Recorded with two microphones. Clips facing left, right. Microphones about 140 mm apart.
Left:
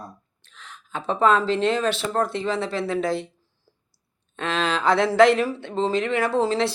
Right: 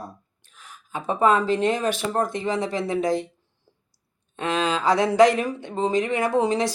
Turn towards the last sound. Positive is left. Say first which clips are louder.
# even
turn(degrees=-15)  # may be behind; listen again after turning